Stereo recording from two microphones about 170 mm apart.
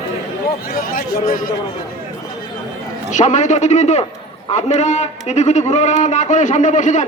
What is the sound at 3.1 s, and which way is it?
A man's voice, 45° left (ahead or behind).